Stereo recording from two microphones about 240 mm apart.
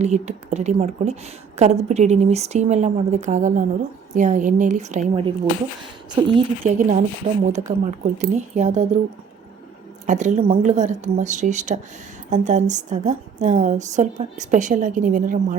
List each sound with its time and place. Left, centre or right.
0.0 s a woman's voice: right
10.1 s a woman's voice: right